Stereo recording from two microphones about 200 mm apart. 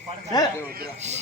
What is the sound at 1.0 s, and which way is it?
Speech, 35° right (ahead or behind).